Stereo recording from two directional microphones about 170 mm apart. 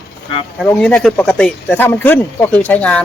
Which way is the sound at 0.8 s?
5° left (ahead or behind).